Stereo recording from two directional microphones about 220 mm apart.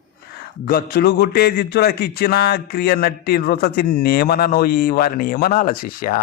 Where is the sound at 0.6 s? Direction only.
40° left (ahead or behind).